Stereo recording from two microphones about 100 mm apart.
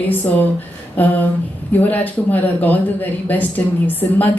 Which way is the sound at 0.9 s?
20° left (ahead or behind).